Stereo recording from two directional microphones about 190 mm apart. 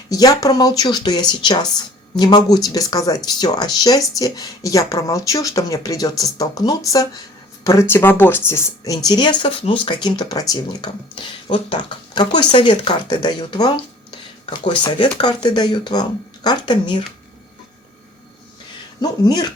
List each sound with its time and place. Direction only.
0.1 s speech: 20° left (ahead or behind)
19.0 s speech: 20° left (ahead or behind)